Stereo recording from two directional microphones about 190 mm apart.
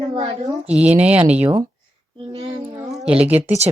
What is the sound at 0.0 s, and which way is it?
Speech, 20° right (ahead or behind).